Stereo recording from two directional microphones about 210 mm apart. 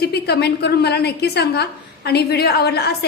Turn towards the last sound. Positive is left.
turn(degrees=50)  # may be behind; listen again after turning